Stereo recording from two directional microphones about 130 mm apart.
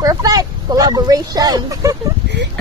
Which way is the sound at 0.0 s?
30° right (ahead or behind).